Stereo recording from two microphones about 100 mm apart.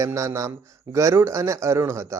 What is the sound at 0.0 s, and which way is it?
Speech, 30° right (ahead or behind).